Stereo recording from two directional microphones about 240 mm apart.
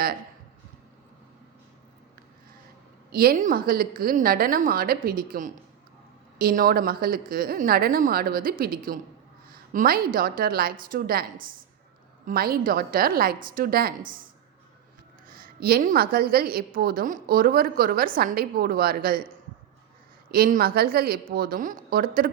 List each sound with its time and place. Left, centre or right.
3.1 s a woman's voice: right
15.3 s a woman's voice: right
20.3 s a woman's voice: right